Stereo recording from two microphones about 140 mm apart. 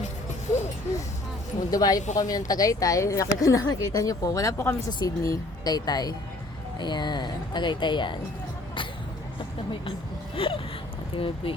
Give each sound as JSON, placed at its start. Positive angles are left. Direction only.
{"t": 1.7, "sound": "speech", "side_deg": 25}
{"t": 4.9, "sound": "speech", "side_deg": 30}
{"t": 10.3, "sound": "a sound", "side_deg": 40}
{"t": 11.1, "sound": "speech", "side_deg": 40}